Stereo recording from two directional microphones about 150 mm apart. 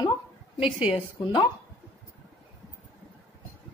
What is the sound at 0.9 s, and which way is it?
Speech, 35° left (ahead or behind).